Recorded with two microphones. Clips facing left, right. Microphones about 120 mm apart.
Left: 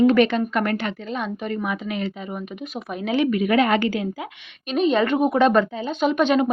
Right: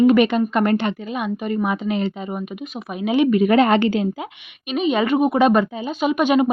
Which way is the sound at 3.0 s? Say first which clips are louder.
Right 4 dB; 15° right (ahead or behind).